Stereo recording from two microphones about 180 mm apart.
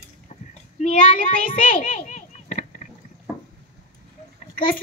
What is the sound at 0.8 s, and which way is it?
A child's voice, 45° left (ahead or behind).